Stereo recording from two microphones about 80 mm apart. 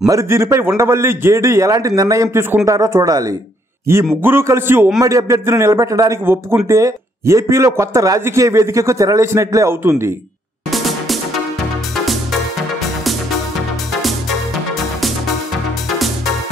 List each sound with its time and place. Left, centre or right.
0.0 s a man's voice: right
4.2 s a man's voice: right
5.0 s a man's voice: right
6.2 s a man's voice: right
10.7 s music: centre